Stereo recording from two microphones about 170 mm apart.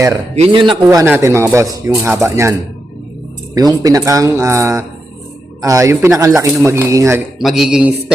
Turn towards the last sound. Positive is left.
turn(degrees=-5)  # may be behind; listen again after turning